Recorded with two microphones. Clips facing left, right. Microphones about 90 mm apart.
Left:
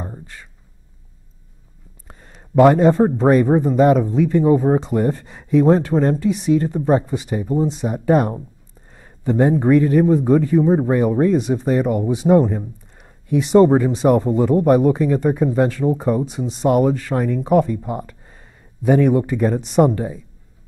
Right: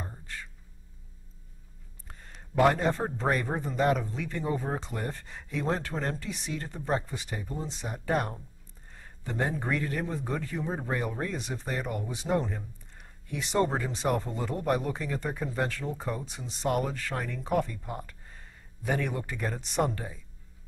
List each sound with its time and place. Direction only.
2.0 s a sound: 20° left (ahead or behind)
2.5 s a man's voice: 15° left (ahead or behind)
13.4 s speech: 10° left (ahead or behind)